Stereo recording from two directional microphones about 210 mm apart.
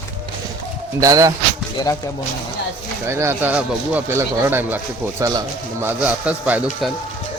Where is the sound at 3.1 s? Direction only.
10° right (ahead or behind).